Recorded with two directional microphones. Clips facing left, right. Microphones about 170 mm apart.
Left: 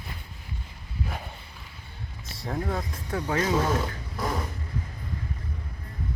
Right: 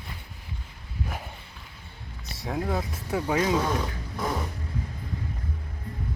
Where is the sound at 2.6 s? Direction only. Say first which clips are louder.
Right 2 dB; 10° right (ahead or behind).